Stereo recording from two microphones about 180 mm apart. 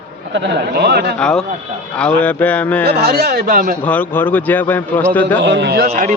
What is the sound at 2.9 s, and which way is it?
Speech, 60° right (ahead or behind).